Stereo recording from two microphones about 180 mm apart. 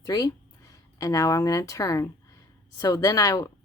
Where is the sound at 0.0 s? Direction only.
20° left (ahead or behind).